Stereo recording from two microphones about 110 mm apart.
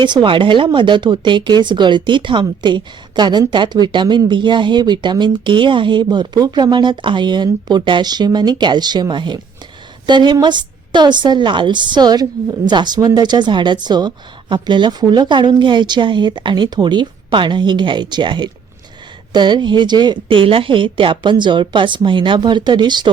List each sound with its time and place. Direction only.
0.0 s speech: 45° right (ahead or behind)